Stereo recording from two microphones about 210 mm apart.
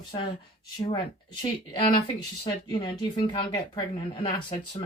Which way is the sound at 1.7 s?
25° left (ahead or behind).